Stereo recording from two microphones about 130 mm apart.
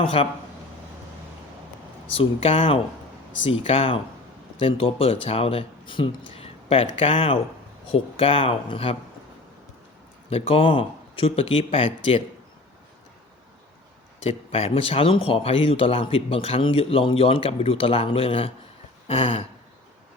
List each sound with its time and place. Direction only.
0.0 s speech: 45° left (ahead or behind)
2.1 s speech: 45° left (ahead or behind)
10.2 s speech: 50° left (ahead or behind)
14.3 s speech: 50° left (ahead or behind)
19.0 s a sound: 50° left (ahead or behind)